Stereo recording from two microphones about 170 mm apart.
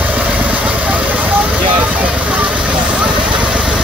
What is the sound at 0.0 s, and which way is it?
Vehicle, 10° right (ahead or behind).